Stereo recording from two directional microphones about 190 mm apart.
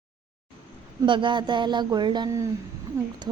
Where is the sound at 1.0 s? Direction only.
25° right (ahead or behind).